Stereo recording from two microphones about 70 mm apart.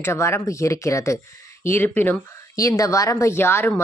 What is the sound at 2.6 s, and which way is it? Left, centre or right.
Speech, left.